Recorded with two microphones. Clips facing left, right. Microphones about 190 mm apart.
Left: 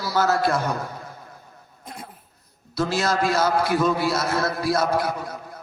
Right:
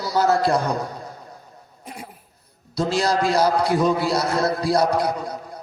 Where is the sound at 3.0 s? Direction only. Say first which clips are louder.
Right 2 dB; 35° right (ahead or behind).